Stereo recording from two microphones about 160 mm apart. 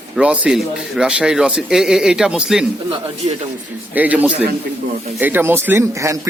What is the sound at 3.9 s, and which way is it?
A man's voice, 10° right (ahead or behind).